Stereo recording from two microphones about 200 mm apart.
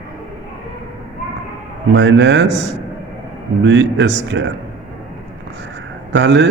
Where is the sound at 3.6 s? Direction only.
65° right (ahead or behind).